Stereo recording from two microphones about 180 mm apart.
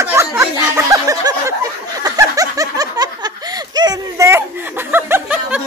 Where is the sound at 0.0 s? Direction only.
15° right (ahead or behind).